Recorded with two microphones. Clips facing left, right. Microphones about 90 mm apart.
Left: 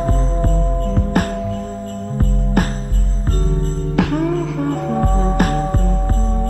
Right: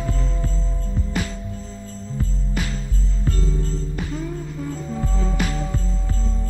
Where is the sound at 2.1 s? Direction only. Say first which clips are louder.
Left 9 dB; 50° left (ahead or behind).